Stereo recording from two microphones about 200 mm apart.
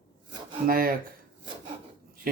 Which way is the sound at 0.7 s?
50° right (ahead or behind).